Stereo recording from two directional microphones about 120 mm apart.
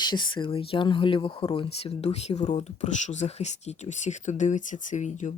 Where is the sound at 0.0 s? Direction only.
40° left (ahead or behind).